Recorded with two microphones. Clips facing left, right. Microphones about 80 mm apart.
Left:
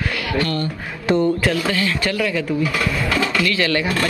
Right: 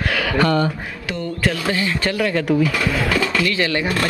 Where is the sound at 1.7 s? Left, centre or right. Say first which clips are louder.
Even; right.